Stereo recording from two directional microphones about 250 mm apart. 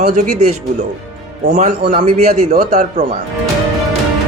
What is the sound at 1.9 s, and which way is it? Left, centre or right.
Speech, right.